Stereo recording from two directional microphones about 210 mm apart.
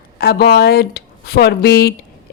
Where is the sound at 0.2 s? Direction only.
50° left (ahead or behind).